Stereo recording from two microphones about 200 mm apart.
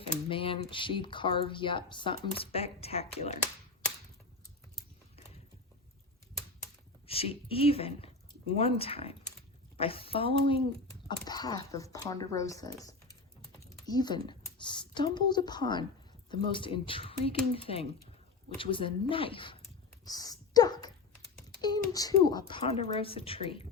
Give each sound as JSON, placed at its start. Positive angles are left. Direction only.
{"t": 0.3, "sound": "speech", "side_deg": 25}
{"t": 7.1, "sound": "speech", "side_deg": 30}
{"t": 20.1, "sound": "a sound", "side_deg": 20}
{"t": 21.6, "sound": "speech", "side_deg": 20}